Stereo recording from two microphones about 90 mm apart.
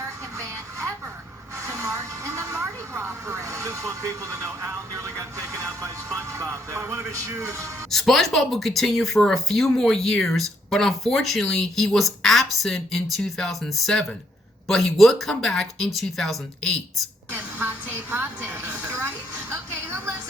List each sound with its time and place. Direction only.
1.6 s speech: 35° right (ahead or behind)
7.9 s speech: 5° left (ahead or behind)
17.3 s a sound: 20° right (ahead or behind)